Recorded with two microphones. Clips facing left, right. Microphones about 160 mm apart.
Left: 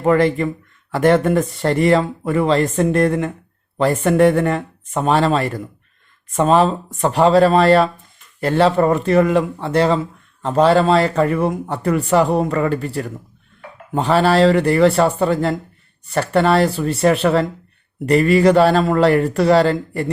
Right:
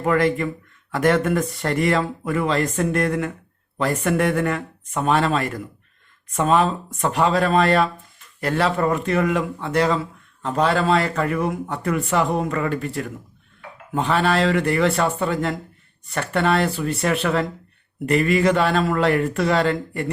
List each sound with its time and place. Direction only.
0.0 s speech: 30° left (ahead or behind)